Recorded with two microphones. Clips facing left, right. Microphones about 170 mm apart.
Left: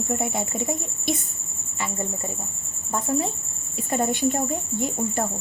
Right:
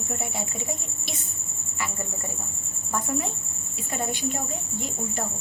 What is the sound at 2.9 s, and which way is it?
Speech, 30° left (ahead or behind).